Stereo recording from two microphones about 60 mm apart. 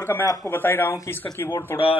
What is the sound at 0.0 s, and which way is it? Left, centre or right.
Speech, left.